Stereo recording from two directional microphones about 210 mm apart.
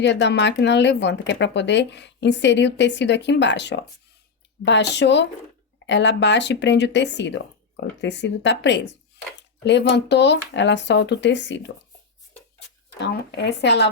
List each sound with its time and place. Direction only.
0.0 s speech: 55° left (ahead or behind)
13.0 s speech: 55° left (ahead or behind)